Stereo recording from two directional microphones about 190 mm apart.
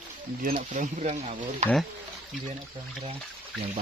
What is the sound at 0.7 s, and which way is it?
Speech, 40° right (ahead or behind).